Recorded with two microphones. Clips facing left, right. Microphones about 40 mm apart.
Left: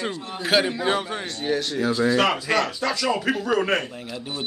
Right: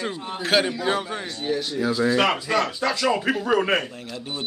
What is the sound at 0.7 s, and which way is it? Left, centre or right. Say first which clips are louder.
Speech: left 1 dB; centre.